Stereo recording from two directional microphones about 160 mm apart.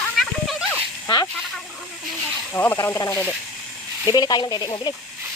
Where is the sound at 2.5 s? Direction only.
15° left (ahead or behind).